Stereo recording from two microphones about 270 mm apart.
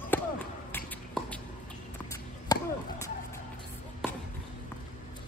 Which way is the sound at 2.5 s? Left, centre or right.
Centre.